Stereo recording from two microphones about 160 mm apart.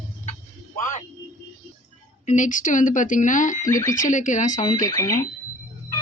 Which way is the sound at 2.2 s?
50° left (ahead or behind).